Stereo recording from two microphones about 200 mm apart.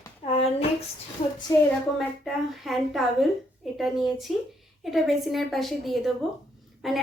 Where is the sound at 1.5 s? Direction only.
20° left (ahead or behind).